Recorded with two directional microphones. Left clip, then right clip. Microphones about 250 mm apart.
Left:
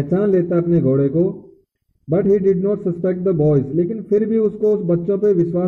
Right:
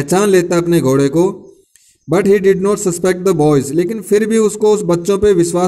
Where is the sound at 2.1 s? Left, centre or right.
Right.